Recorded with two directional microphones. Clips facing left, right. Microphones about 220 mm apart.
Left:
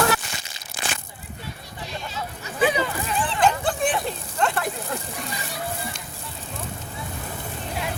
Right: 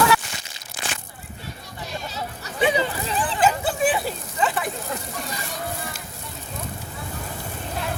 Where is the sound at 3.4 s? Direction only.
5° right (ahead or behind).